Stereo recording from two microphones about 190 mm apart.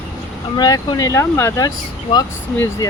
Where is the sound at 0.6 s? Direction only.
20° left (ahead or behind).